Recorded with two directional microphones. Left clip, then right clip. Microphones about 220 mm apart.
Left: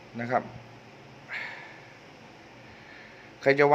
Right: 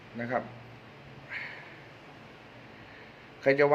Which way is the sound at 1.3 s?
20° left (ahead or behind).